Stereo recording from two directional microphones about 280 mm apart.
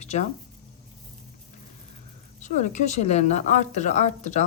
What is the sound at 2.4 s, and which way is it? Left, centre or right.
Speech, left.